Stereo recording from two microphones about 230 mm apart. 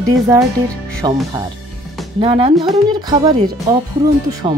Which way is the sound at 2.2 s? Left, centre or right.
Right.